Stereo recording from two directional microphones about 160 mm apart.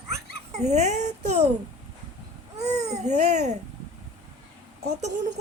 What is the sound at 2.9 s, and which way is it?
Speech, 45° right (ahead or behind).